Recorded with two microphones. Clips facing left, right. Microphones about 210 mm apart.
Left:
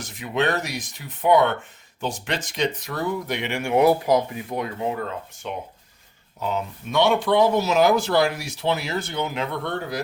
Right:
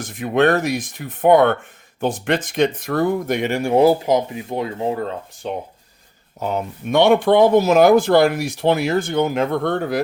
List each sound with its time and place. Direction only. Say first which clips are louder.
0.0 s speech: right 7 dB; 55° right (ahead or behind); by 5.5 s 35° right (ahead or behind)
6.4 s speech: right 4 dB; 50° right (ahead or behind)